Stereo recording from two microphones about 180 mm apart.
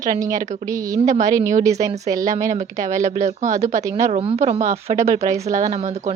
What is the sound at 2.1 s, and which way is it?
Speech, 20° right (ahead or behind).